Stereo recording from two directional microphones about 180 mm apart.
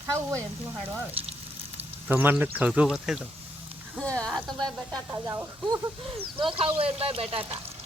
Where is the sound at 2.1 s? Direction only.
10° right (ahead or behind).